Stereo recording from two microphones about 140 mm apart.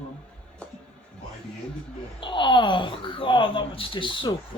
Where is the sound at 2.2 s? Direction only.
35° left (ahead or behind).